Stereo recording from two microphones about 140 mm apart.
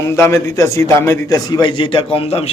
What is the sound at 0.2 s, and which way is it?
A man's voice, 20° left (ahead or behind).